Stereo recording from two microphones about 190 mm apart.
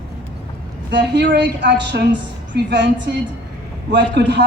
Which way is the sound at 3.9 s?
65° right (ahead or behind).